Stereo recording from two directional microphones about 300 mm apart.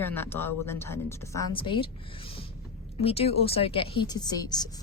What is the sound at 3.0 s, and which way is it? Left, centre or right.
Speech, centre.